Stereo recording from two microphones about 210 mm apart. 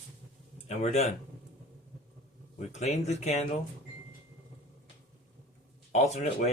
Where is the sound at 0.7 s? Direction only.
30° left (ahead or behind).